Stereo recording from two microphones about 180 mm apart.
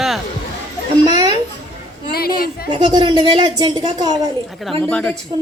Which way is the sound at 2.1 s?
55° left (ahead or behind).